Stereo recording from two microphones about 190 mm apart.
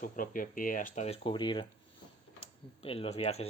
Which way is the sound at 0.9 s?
30° left (ahead or behind).